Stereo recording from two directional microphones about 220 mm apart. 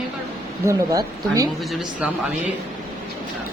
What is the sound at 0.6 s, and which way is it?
Speech, 15° right (ahead or behind).